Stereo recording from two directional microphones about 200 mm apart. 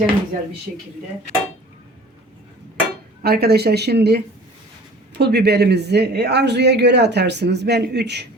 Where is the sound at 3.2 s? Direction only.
50° right (ahead or behind).